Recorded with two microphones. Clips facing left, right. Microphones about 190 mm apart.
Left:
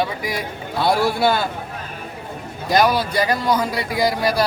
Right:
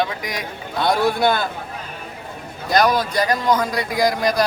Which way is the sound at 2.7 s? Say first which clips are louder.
Even; 10° left (ahead or behind).